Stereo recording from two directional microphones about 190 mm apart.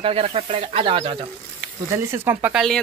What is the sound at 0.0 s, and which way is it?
Speech, 30° right (ahead or behind).